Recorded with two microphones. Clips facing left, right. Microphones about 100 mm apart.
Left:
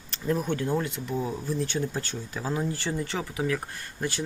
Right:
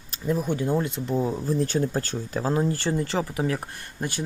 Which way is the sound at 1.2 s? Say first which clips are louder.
Right 5 dB; 40° right (ahead or behind).